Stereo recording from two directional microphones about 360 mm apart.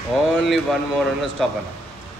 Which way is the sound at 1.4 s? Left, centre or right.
Centre.